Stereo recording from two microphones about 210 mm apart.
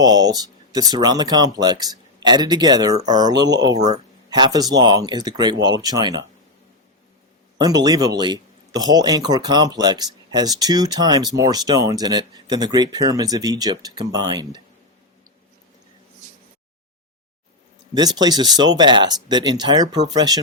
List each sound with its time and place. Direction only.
0.0 s speech: 20° right (ahead or behind)
7.6 s speech: 20° right (ahead or behind)
17.9 s speech: 20° right (ahead or behind)